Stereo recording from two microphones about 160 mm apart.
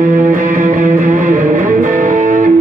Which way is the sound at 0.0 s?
55° right (ahead or behind).